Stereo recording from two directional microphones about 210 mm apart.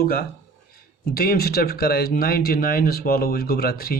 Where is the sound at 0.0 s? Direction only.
45° left (ahead or behind).